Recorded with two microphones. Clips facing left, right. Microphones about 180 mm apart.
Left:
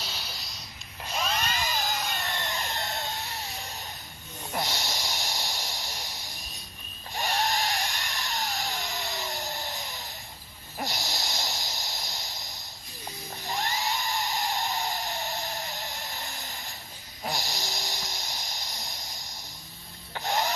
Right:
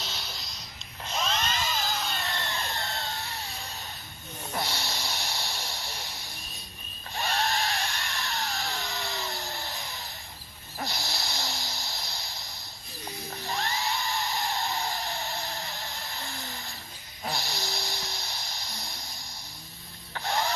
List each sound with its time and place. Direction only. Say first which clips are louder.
0.0 s a sound: even; 10° left (ahead or behind)
7.1 s dental drill: left 1 dB; 15° left (ahead or behind)
10.8 s snort: left 1 dB; 20° left (ahead or behind)
13.4 s dental drill: left 1 dB; 20° left (ahead or behind)
17.2 s snoring: even; 15° left (ahead or behind)
20.1 s music: left 1 dB; 20° left (ahead or behind)